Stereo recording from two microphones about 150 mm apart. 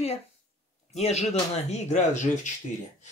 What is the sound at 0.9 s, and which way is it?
Speech, 45° left (ahead or behind).